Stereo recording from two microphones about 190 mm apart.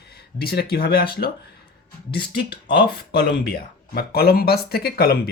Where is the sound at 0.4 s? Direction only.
55° left (ahead or behind).